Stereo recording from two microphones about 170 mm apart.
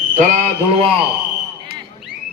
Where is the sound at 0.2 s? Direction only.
50° right (ahead or behind).